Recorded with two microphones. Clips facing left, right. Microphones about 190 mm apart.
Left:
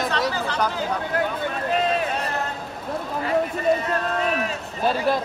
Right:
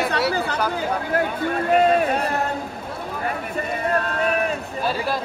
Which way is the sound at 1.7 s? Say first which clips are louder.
Right 6 dB; 55° right (ahead or behind).